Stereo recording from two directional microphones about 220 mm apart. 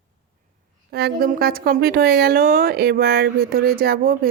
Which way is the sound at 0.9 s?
45° right (ahead or behind).